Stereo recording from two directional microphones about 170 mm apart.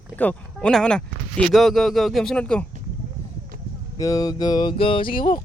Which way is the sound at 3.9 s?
20° left (ahead or behind).